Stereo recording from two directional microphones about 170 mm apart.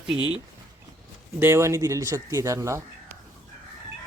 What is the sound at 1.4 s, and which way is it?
Speech, 15° right (ahead or behind).